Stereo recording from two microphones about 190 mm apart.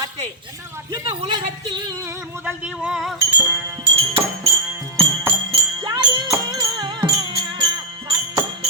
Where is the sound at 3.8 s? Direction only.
30° right (ahead or behind).